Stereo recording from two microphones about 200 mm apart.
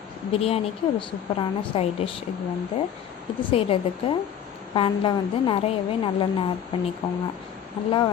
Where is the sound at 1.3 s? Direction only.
25° left (ahead or behind).